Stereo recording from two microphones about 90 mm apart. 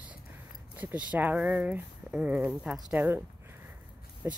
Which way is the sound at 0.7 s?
15° right (ahead or behind).